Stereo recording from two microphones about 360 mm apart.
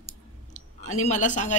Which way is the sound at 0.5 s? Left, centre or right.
Centre.